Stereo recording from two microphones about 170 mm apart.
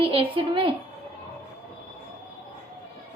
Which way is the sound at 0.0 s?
30° right (ahead or behind).